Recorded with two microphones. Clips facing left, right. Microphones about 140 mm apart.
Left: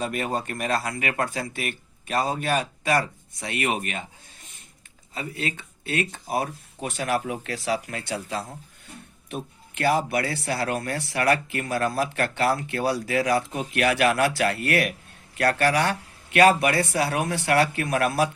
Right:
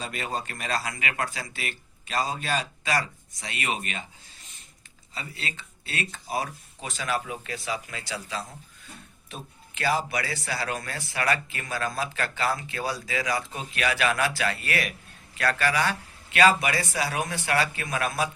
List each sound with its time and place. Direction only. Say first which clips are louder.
0.0 s speech: left 5 dB; 55° left (ahead or behind)
5.1 s speech: left 6 dB; 50° left (ahead or behind); by 18.3 s 65° left (ahead or behind)